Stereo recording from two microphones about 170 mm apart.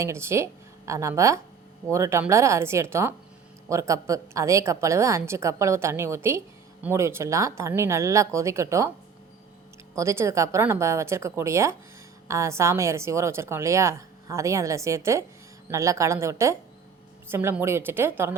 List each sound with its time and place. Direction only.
0.0 s speech: 15° right (ahead or behind)
9.9 s speech: 15° right (ahead or behind)